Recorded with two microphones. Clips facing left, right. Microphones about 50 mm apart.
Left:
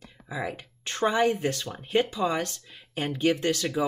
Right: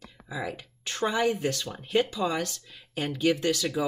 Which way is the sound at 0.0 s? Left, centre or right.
Left.